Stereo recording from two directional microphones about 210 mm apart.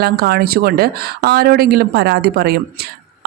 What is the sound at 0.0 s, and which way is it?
A woman's voice, 50° right (ahead or behind).